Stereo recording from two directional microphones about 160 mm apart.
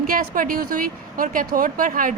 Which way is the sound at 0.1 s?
60° right (ahead or behind).